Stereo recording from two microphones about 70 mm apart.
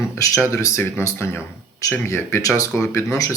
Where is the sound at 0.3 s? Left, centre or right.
Left.